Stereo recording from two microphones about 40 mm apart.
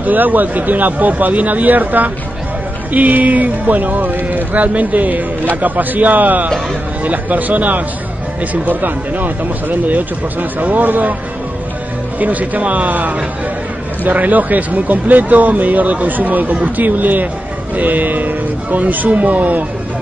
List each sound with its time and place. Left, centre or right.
0.0 s speech: right
12.2 s speech: right